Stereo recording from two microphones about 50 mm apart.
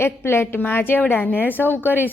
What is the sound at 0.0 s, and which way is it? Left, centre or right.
A woman's voice, left.